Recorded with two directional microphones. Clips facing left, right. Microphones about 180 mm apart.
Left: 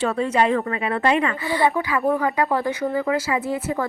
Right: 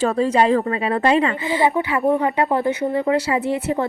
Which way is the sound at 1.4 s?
20° right (ahead or behind).